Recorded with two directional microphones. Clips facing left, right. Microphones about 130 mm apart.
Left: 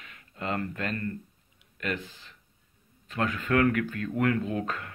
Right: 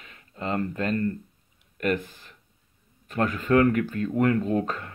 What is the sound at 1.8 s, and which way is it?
Speech, 50° right (ahead or behind).